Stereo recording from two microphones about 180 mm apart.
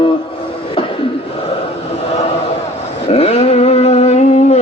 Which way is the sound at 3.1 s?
35° left (ahead or behind).